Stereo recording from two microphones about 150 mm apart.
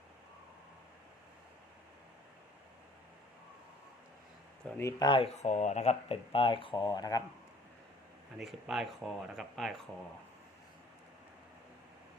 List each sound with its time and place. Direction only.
4.8 s speech: 25° left (ahead or behind)
8.4 s speech: centre (ahead or behind)